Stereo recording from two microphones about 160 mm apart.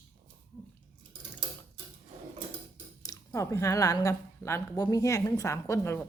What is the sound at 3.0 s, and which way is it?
Speech, 20° left (ahead or behind).